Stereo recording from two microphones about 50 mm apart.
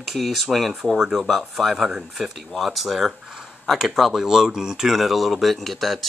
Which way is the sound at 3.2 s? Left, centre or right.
Centre.